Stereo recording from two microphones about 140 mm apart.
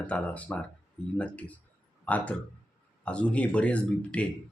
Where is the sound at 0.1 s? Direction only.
10° left (ahead or behind).